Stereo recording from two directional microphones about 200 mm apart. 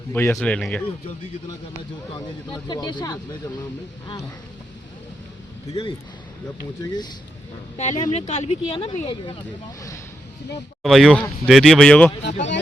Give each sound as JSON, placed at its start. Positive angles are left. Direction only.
{"t": 0.1, "sound": "speech", "side_deg": 10}
{"t": 2.1, "sound": "speech", "side_deg": 20}
{"t": 5.7, "sound": "speech", "side_deg": 30}
{"t": 6.8, "sound": "speech", "side_deg": 20}
{"t": 7.8, "sound": "speech", "side_deg": 35}
{"t": 10.8, "sound": "speech", "side_deg": 0}